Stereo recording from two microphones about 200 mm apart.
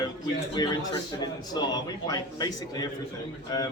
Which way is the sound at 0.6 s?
20° left (ahead or behind).